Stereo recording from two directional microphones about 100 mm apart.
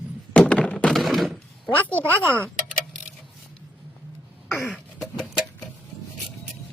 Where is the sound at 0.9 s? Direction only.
Centre (ahead or behind).